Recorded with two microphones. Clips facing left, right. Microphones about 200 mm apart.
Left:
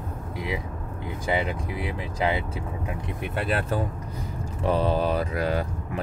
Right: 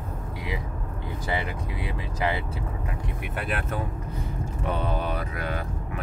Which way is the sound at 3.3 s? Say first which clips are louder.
Left 4 dB; 30° left (ahead or behind).